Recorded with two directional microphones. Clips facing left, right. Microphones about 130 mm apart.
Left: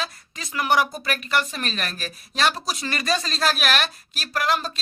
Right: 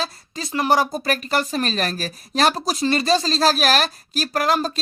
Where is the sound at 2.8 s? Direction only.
30° right (ahead or behind).